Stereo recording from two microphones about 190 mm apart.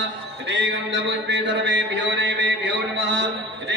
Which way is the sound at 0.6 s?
70° right (ahead or behind).